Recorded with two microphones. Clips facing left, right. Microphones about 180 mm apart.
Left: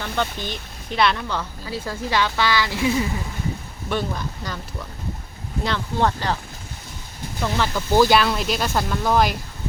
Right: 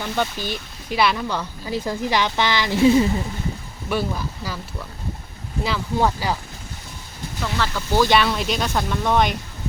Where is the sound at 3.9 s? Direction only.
5° right (ahead or behind).